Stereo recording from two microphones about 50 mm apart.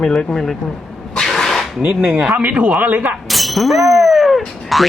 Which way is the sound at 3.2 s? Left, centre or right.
Centre.